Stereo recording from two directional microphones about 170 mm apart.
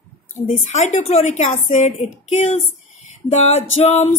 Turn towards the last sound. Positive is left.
turn(degrees=40)  # may be behind; listen again after turning